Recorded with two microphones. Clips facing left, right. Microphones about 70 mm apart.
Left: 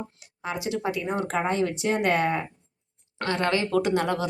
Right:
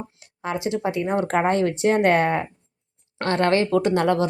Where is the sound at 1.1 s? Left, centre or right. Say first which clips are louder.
Right 7 dB; right.